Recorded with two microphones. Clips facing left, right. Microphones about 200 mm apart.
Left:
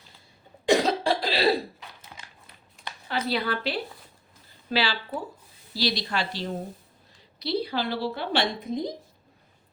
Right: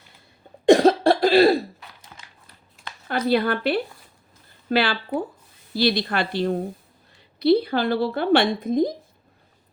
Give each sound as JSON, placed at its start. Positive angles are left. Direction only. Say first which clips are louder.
{"t": 0.7, "sound": "cough", "louder": "right 8 dB", "side_deg": -55}
{"t": 3.1, "sound": "a woman's voice", "louder": "right 7 dB", "side_deg": -50}